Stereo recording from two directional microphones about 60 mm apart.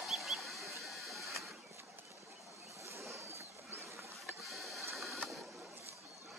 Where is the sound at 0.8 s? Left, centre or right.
Centre.